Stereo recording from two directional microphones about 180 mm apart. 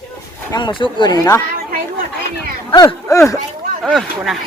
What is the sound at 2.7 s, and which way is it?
Speech, 20° left (ahead or behind).